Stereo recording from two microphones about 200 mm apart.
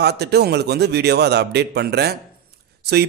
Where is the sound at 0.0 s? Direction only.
55° right (ahead or behind).